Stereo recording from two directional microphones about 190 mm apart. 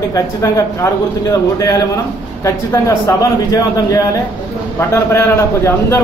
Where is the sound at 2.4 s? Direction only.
15° left (ahead or behind).